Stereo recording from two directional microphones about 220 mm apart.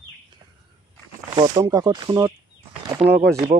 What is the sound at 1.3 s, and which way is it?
Speech, 15° right (ahead or behind).